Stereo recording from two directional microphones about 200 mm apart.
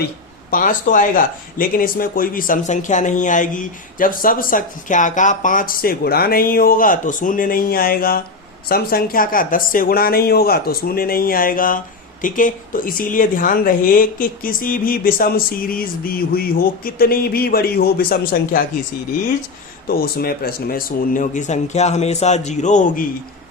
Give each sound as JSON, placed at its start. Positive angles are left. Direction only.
{"t": 0.5, "sound": "speech", "side_deg": 40}
{"t": 19.9, "sound": "speech", "side_deg": 50}